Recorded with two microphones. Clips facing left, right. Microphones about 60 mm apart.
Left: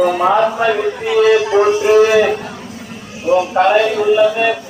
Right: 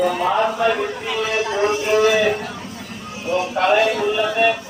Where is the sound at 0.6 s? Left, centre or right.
Left.